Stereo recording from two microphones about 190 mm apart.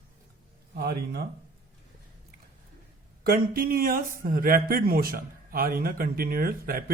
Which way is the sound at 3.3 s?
50° right (ahead or behind).